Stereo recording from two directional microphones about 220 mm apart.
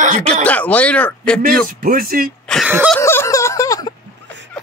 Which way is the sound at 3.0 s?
10° left (ahead or behind).